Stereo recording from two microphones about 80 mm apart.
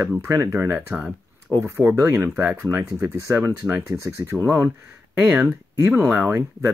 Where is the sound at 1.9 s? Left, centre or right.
Right.